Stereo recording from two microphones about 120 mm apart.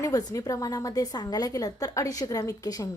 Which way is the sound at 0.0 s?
30° left (ahead or behind).